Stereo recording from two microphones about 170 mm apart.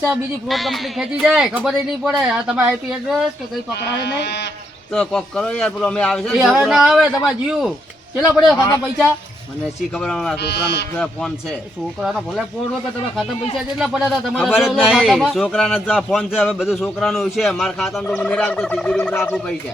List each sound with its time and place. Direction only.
0.0 s speech: centre (ahead or behind)
3.8 s speech: 80° left
4.9 s a man's voice: 5° left (ahead or behind)
9.9 s speech: 5° left (ahead or behind)
10.3 s speech: 75° left (ahead or behind)
10.9 s speech: 5° left (ahead or behind)